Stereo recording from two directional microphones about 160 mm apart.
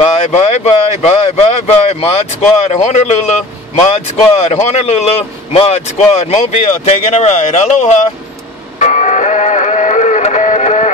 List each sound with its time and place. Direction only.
0.2 s speech: 45° left (ahead or behind)
8.7 s music: 45° left (ahead or behind)